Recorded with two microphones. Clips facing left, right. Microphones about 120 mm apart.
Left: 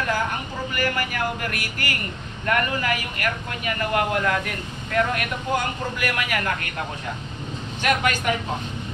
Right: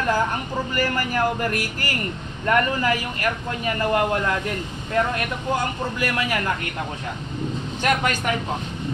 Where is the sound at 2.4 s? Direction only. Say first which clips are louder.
Right 3 dB; 30° right (ahead or behind).